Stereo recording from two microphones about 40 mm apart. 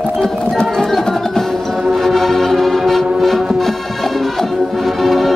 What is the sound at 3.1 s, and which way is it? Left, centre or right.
Music, centre.